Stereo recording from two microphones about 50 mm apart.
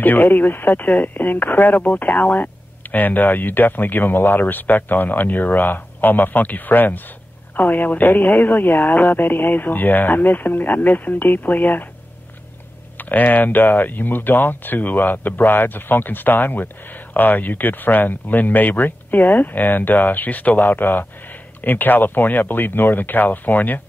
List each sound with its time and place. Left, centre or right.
0.0 s speech: left
13.1 s speech: left